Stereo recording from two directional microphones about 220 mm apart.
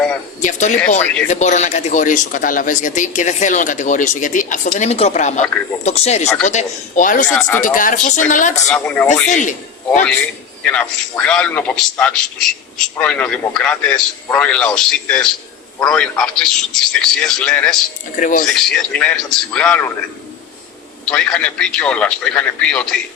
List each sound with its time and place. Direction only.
0.4 s speech: 35° left (ahead or behind)
7.3 s speech: 5° left (ahead or behind)
7.6 s speech: 35° left (ahead or behind)
8.6 s speech: 5° left (ahead or behind)
9.2 s a man's voice: 35° left (ahead or behind)
10.6 s a man's voice: 5° left (ahead or behind)
18.2 s speech: 35° left (ahead or behind)
18.4 s a man's voice: centre (ahead or behind)
21.0 s a man's voice: 5° left (ahead or behind)